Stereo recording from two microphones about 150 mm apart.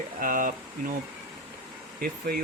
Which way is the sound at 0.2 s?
65° right (ahead or behind).